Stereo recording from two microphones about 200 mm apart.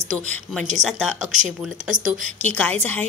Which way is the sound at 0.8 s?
Centre (ahead or behind).